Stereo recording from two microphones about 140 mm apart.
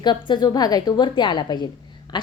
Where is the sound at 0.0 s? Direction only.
30° left (ahead or behind).